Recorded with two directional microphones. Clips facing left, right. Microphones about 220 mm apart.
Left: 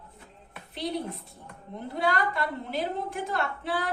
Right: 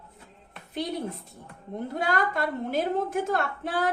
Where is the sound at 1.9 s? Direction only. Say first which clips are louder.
Even; 45° right (ahead or behind).